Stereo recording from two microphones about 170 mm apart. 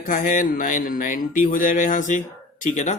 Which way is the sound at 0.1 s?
50° left (ahead or behind).